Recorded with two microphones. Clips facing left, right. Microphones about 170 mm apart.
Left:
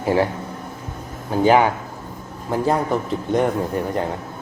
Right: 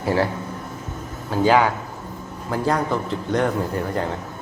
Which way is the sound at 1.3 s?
25° left (ahead or behind).